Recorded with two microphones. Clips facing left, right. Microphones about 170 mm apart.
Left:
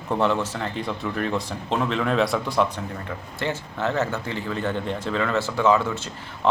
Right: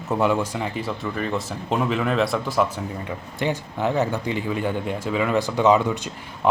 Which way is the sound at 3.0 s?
15° right (ahead or behind).